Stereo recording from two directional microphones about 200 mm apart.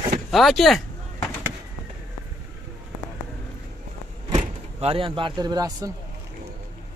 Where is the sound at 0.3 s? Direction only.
Centre (ahead or behind).